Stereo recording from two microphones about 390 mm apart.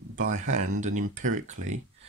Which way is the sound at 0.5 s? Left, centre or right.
Right.